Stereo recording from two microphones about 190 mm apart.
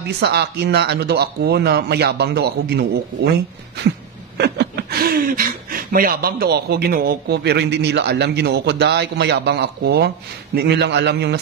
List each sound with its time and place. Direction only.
0.2 s speech: 60° right (ahead or behind)